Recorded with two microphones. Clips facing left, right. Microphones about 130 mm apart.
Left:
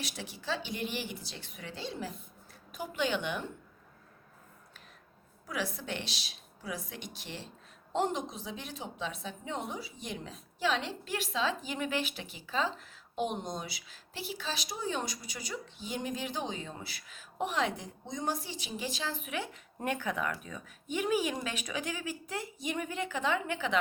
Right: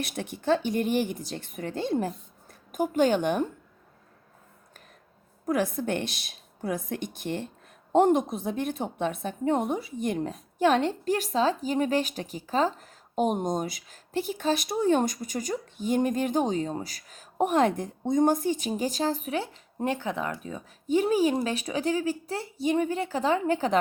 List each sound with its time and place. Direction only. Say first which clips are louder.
0.0 s a woman's voice: right 9 dB; 55° right (ahead or behind)
5.5 s a woman's voice: right 10 dB; 50° right (ahead or behind)